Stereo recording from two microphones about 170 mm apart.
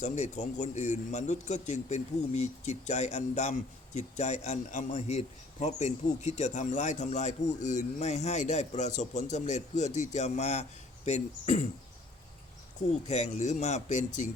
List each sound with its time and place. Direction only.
0.0 s a man's voice: 45° left (ahead or behind)
13.1 s a man's voice: 45° left (ahead or behind)